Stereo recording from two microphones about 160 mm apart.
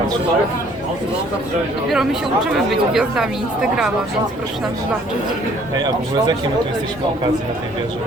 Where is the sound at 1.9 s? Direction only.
5° right (ahead or behind).